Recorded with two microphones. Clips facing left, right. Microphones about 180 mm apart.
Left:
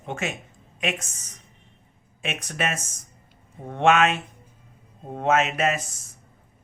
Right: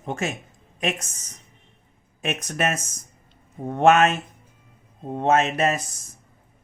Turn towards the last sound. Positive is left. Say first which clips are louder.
# right 2 dB
turn(degrees=-35)  # may be behind; listen again after turning